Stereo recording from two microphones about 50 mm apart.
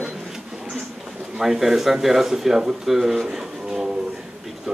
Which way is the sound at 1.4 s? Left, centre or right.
Centre.